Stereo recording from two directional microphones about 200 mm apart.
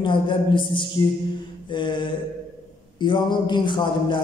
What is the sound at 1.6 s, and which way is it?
Mantra, 25° left (ahead or behind).